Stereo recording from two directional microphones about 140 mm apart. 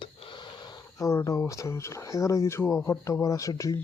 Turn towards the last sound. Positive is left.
turn(degrees=25)  # may be behind; listen again after turning